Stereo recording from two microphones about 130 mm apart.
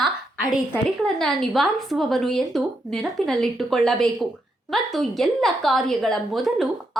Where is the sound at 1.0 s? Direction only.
5° left (ahead or behind).